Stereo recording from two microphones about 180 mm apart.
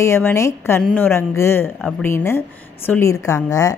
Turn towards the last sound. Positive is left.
turn(degrees=20)  # may be behind; listen again after turning